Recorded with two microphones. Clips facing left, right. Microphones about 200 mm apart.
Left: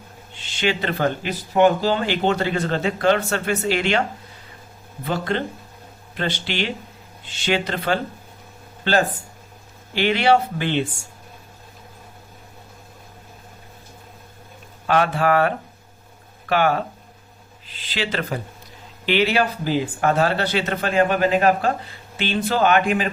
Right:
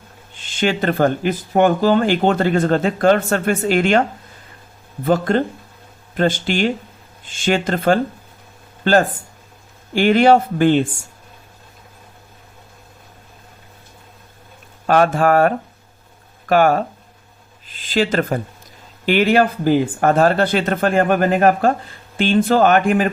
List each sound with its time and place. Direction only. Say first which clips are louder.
0.3 s speech: right 4 dB; 50° right (ahead or behind)
5.0 s speech: right 7 dB; 45° right (ahead or behind)
14.8 s speech: right 5 dB; 45° right (ahead or behind)